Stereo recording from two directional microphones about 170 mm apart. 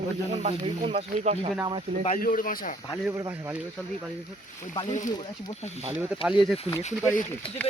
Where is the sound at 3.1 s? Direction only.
15° right (ahead or behind).